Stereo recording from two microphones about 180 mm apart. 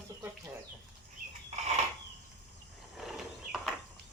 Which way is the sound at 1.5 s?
40° right (ahead or behind).